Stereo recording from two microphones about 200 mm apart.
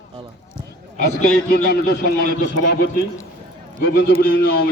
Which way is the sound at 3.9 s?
45° left (ahead or behind).